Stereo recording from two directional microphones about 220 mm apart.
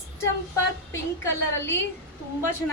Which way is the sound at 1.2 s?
10° left (ahead or behind).